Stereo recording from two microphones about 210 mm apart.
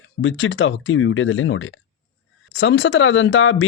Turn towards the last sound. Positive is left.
turn(degrees=65)  # may be behind; listen again after turning